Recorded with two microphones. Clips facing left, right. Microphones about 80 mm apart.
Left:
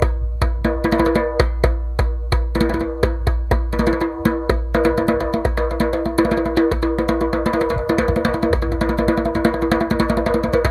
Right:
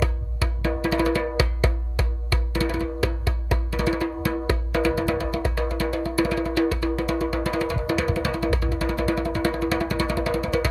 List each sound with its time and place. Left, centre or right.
0.0 s music: left